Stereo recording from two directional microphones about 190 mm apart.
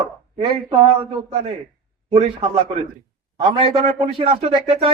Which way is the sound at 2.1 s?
30° right (ahead or behind).